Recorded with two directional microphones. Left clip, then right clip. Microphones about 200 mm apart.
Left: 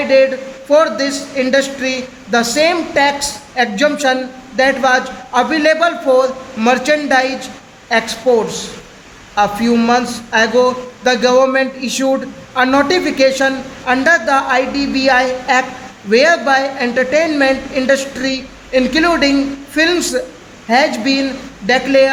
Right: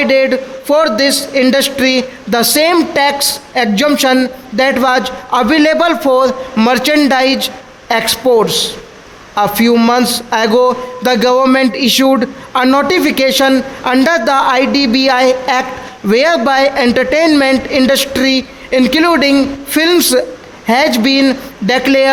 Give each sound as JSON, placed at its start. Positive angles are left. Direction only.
{"t": 0.1, "sound": "a man's voice", "side_deg": -50}